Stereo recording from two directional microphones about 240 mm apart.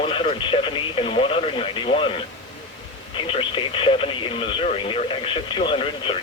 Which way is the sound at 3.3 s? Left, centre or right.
Left.